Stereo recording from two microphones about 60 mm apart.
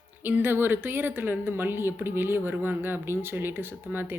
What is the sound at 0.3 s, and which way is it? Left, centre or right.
A woman's voice, right.